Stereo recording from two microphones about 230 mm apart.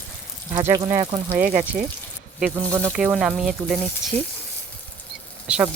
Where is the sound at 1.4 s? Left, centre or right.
Right.